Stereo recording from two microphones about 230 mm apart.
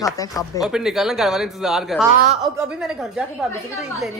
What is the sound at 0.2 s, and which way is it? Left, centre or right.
Speech, centre.